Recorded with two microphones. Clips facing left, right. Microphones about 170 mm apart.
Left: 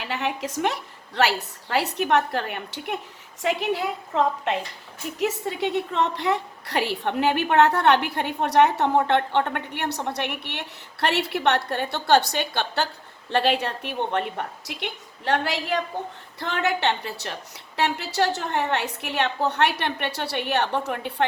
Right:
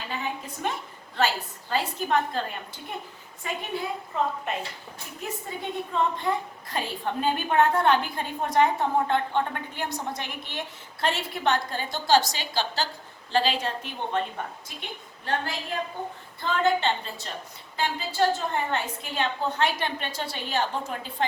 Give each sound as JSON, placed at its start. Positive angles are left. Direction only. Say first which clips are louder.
{"t": 0.0, "sound": "a woman's voice", "louder": "left 5 dB", "side_deg": 80}